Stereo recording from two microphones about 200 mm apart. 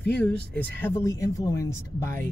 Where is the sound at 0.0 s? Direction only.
5° left (ahead or behind).